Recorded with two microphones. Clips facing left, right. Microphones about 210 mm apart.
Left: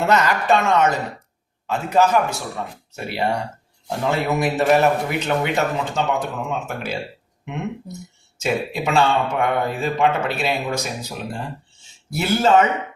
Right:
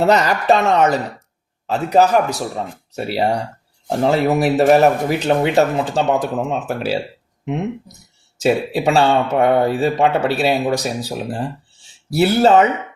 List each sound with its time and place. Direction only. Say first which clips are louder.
0.0 s speech: right 4 dB; 35° right (ahead or behind)
8.4 s speech: right 6 dB; 35° right (ahead or behind)